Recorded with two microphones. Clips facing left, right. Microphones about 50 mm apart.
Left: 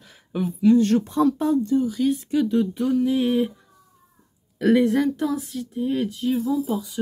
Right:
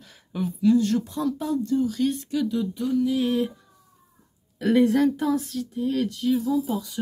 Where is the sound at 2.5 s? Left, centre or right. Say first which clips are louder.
Left 4 dB; left.